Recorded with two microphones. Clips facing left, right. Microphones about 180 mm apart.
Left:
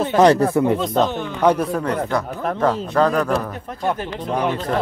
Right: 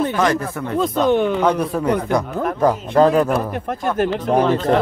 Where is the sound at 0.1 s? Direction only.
35° left (ahead or behind).